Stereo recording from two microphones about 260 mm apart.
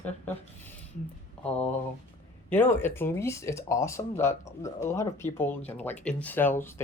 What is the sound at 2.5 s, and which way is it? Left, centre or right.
Speech, centre.